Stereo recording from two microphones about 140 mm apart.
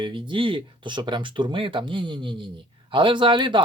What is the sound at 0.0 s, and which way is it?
Speech, 35° right (ahead or behind).